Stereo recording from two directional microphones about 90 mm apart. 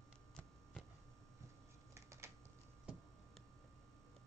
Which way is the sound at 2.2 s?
30° right (ahead or behind).